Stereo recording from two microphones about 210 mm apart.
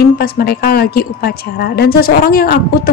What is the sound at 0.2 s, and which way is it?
A woman's voice, 45° left (ahead or behind).